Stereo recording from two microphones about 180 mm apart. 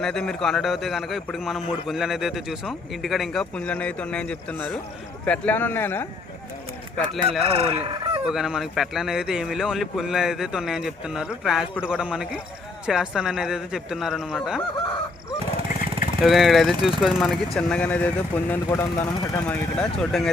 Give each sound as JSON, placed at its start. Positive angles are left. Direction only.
{"t": 0.0, "sound": "a man's voice", "side_deg": 5}
{"t": 7.4, "sound": "chicken", "side_deg": -35}
{"t": 8.2, "sound": "a man's voice", "side_deg": -5}
{"t": 16.2, "sound": "a man's voice", "side_deg": 0}
{"t": 19.5, "sound": "a man's voice", "side_deg": 5}